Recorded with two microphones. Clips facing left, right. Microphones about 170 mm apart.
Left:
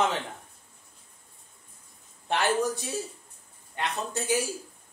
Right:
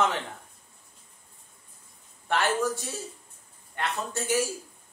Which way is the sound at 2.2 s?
15° left (ahead or behind).